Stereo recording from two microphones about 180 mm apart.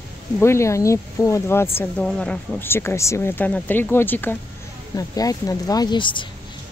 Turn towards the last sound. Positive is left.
turn(degrees=25)  # may be behind; listen again after turning